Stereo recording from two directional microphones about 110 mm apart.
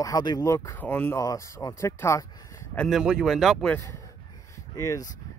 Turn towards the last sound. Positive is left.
turn(degrees=30)  # may be behind; listen again after turning